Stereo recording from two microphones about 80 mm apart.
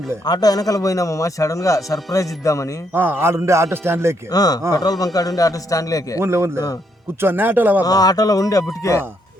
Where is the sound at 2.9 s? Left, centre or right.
Right.